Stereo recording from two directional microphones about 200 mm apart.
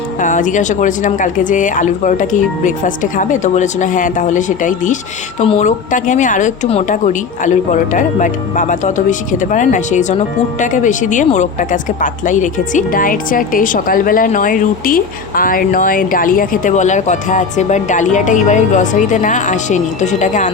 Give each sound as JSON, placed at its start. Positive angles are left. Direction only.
{"t": 0.2, "sound": "a woman's voice", "side_deg": 40}